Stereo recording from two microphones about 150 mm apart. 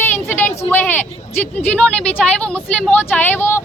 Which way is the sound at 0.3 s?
15° left (ahead or behind).